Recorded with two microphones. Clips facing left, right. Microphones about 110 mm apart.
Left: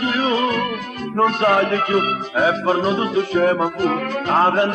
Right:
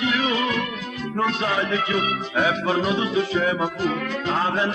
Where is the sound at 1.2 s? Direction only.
55° left (ahead or behind).